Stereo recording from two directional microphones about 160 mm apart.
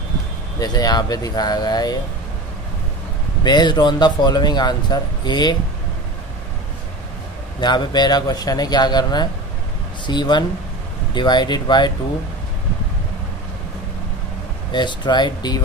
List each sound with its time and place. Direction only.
0.6 s speech: 25° left (ahead or behind)
3.4 s speech: 25° left (ahead or behind)
7.6 s speech: 25° left (ahead or behind)
14.7 s speech: 30° left (ahead or behind)